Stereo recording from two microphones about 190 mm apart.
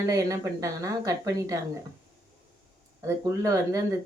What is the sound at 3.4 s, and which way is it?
Speech, 15° right (ahead or behind).